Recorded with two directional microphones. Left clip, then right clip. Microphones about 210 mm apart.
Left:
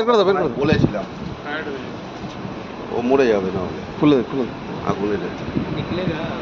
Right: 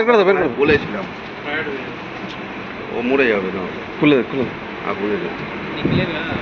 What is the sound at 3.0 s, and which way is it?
Speech, 30° left (ahead or behind).